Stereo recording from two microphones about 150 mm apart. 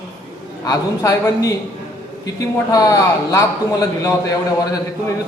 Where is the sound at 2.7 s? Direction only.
20° left (ahead or behind).